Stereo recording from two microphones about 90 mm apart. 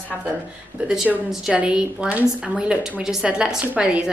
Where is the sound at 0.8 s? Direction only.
5° right (ahead or behind).